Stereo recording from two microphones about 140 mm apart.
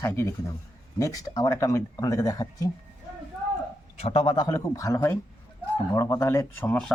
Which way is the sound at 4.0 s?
50° left (ahead or behind).